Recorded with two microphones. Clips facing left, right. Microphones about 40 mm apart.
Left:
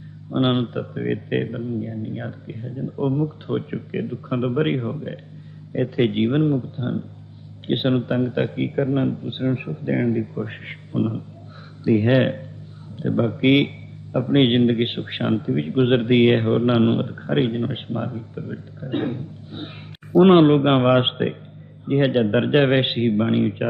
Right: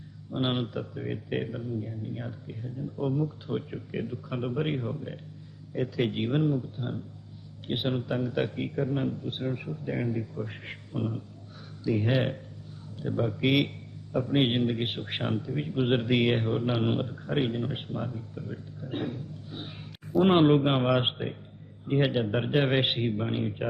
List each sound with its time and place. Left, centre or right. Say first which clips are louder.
0.3 s speech: left 9 dB; left
3.9 s speech: left 7 dB; left
4.4 s speech: left 9 dB; left
4.8 s speech: left 6 dB; left
8.3 s speech: left 6 dB; left
8.5 s speech: left 8 dB; left
11.9 s speech: left 10 dB; left
14.3 s speech: left 10 dB; left
15.0 s speech: left 9 dB; left
16.3 s speech: left 9 dB; left
18.8 s speech: left 9 dB; left
20.2 s speech: left 7 dB; left
22.8 s speech: left 8 dB; left